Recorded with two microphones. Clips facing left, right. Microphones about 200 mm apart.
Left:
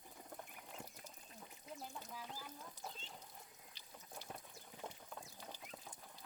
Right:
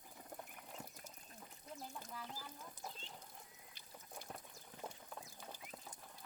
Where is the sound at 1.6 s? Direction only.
5° left (ahead or behind).